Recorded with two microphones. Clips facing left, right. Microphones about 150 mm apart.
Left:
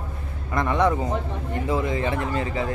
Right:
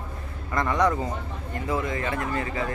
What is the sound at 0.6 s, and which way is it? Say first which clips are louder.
Speech: left 2 dB; 20° left (ahead or behind).